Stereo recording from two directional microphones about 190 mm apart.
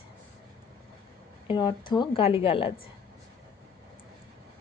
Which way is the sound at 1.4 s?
25° left (ahead or behind).